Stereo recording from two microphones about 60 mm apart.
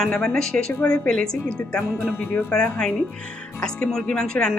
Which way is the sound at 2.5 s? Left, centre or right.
Centre.